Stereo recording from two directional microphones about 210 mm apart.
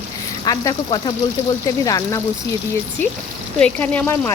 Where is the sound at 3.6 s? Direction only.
5° left (ahead or behind).